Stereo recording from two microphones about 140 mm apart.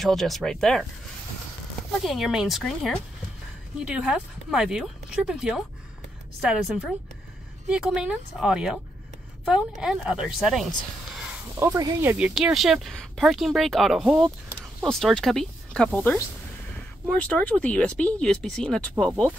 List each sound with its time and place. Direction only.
0.0 s a woman's voice: centre (ahead or behind)
1.9 s a woman's voice: centre (ahead or behind)
11.6 s speech: 20° right (ahead or behind)
12.4 s a woman's voice: centre (ahead or behind)